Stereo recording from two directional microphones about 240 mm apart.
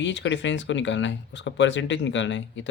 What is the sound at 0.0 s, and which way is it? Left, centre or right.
Speech, left.